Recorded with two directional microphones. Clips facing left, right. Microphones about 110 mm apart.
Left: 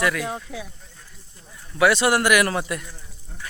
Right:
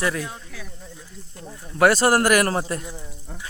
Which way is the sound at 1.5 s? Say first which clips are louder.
Right 1 dB; 45° right (ahead or behind).